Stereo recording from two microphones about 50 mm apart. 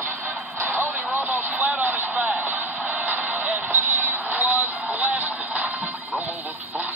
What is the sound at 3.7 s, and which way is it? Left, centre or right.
Music, right.